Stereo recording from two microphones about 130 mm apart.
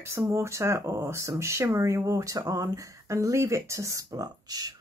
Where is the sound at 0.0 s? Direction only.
20° right (ahead or behind).